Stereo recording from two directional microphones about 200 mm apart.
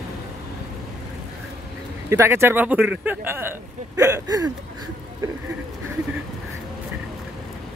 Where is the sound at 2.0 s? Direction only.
15° right (ahead or behind).